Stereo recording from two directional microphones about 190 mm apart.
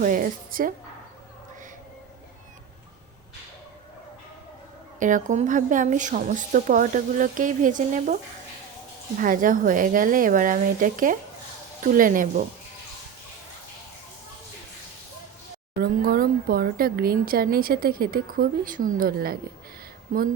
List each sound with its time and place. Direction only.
0.0 s speech: 45° right (ahead or behind)
4.9 s speech: 40° right (ahead or behind)
9.1 s speech: 45° right (ahead or behind)
15.8 s speech: 50° right (ahead or behind)